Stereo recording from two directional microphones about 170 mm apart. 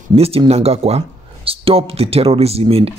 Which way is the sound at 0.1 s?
35° right (ahead or behind).